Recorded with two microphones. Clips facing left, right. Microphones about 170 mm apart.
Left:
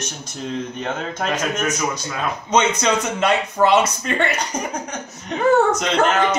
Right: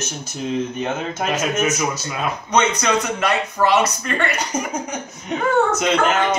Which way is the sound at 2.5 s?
20° left (ahead or behind).